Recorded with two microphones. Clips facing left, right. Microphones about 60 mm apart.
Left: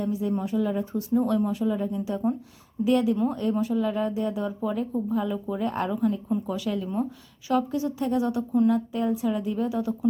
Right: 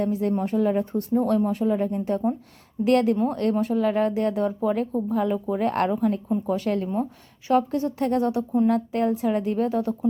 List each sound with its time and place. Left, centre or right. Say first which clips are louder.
0.0 s speech: right 3 dB; right
2.8 s speech: right 2 dB; right
3.5 s speech: right 3 dB; right
6.2 s a woman's voice: right 3 dB; right
8.6 s speech: right 3 dB; right